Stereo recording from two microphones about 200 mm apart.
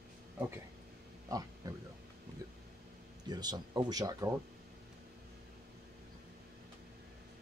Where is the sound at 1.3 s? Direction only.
15° right (ahead or behind).